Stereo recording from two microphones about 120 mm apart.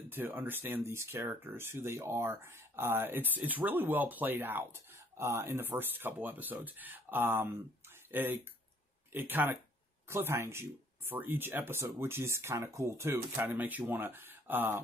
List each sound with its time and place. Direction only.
0.1 s speech: 15° right (ahead or behind)